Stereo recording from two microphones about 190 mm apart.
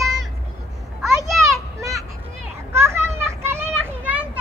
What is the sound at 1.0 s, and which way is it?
Children playing, centre (ahead or behind).